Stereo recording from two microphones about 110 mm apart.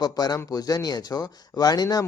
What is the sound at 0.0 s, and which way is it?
Speech, 35° left (ahead or behind).